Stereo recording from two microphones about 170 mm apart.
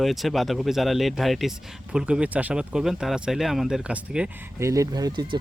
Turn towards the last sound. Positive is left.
turn(degrees=-25)  # may be behind; listen again after turning